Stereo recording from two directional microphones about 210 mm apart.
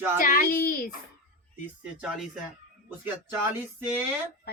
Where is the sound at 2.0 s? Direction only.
Centre (ahead or behind).